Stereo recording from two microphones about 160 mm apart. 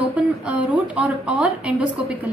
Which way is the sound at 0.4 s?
5° right (ahead or behind).